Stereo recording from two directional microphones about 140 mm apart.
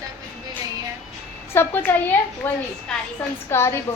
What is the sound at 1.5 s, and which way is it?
A woman's voice, 15° left (ahead or behind).